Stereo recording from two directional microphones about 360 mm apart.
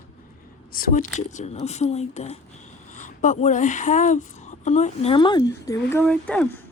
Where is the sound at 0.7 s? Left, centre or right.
Left; by 6.5 s centre.